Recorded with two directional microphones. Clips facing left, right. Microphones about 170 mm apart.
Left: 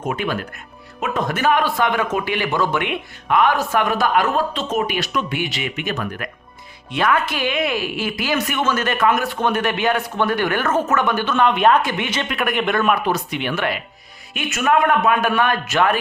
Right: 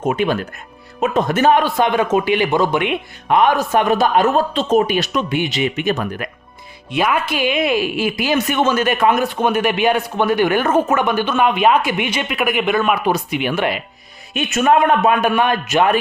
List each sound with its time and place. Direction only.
0.0 s a man's voice: 20° right (ahead or behind)
6.9 s speech: 10° right (ahead or behind)
14.3 s a man's voice: 25° right (ahead or behind)